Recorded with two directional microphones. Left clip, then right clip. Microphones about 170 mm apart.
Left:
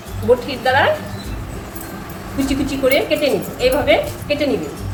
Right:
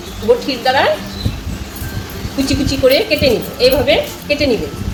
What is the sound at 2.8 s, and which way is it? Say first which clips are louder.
A woman's voice: right 4 dB; 30° right (ahead or behind).